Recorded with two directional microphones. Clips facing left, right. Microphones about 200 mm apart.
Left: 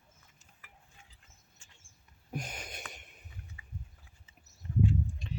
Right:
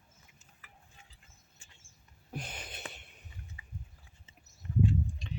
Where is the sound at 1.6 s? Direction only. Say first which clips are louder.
Right 2 dB; 10° right (ahead or behind).